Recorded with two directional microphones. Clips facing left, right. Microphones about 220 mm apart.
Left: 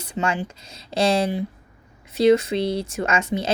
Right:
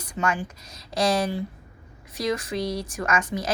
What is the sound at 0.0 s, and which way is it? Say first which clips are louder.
Speech: left 2 dB; 30° left (ahead or behind).